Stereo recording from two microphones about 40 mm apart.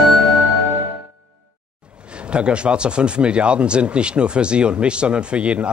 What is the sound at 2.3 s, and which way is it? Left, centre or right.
A man's voice, right.